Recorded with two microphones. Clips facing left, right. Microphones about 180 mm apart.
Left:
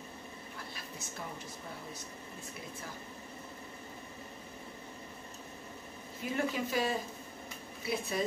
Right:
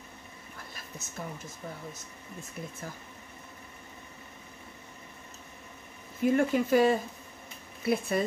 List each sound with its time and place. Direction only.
1.0 s speech: 45° right (ahead or behind)
6.3 s speech: 55° right (ahead or behind)